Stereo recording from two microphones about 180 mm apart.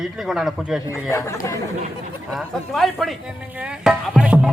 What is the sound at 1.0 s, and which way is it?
Speech, 15° left (ahead or behind).